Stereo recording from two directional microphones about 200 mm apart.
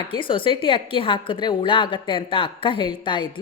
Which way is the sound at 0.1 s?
25° left (ahead or behind).